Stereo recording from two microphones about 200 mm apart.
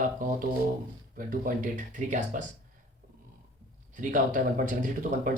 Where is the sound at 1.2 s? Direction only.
45° right (ahead or behind).